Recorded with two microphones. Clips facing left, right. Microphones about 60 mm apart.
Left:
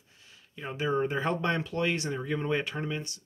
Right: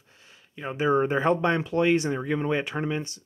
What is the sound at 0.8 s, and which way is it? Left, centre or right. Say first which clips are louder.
Speech: right 6 dB; right.